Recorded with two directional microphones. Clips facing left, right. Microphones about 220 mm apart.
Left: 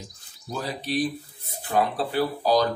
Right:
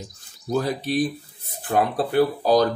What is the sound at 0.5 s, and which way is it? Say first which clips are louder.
Speech: right 6 dB; 50° right (ahead or behind).